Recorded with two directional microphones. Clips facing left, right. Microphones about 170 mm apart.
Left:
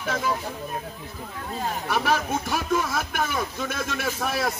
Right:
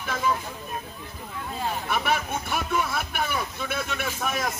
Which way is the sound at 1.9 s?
35° left (ahead or behind).